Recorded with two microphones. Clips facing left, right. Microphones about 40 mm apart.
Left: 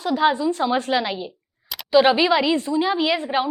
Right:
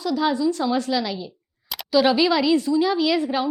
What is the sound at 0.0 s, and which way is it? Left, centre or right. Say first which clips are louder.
A woman's voice: left 2 dB; left.